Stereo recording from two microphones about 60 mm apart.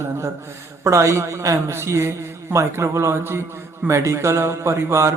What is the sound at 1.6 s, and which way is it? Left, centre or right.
A man's voice, right.